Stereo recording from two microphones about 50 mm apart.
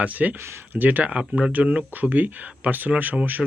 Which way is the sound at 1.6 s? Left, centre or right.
Right.